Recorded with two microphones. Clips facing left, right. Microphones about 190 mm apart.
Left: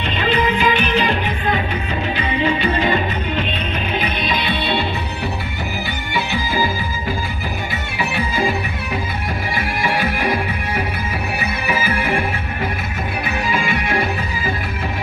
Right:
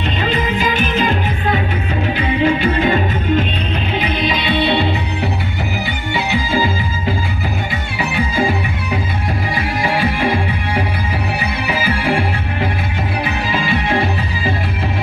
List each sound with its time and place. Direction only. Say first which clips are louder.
0.3 s music: left 3 dB; 45° right (ahead or behind)
2.1 s music: right 4 dB; 50° right (ahead or behind)